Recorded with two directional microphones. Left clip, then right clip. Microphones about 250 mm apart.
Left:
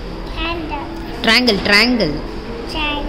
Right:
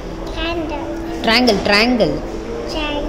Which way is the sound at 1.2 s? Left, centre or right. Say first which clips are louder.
Left 1 dB; centre.